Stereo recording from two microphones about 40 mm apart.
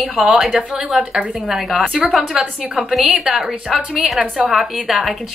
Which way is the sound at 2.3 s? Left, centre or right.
Right.